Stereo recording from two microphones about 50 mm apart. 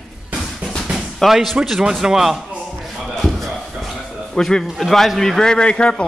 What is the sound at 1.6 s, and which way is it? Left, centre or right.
Speech, centre.